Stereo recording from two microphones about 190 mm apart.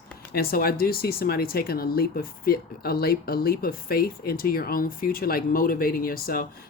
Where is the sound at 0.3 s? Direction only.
50° left (ahead or behind).